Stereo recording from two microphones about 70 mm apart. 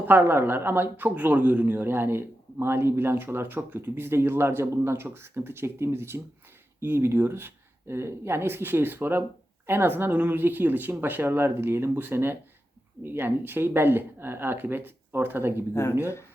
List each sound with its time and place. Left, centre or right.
0.1 s speech: right
15.7 s speech: left